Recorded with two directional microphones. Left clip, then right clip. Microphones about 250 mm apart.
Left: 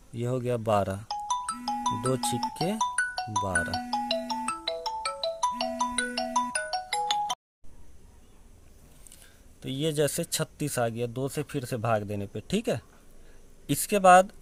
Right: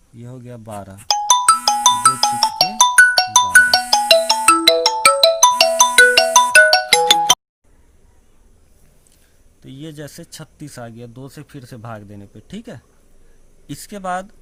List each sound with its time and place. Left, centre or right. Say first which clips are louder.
0.2 s speech: left 8 dB; left
1.0 s music: right 17 dB; right
3.5 s ringtone: right 17 dB; right
9.6 s speech: left 7 dB; left